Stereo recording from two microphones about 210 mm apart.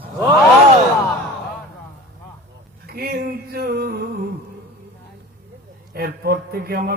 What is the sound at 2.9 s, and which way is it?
A man's voice, 45° right (ahead or behind).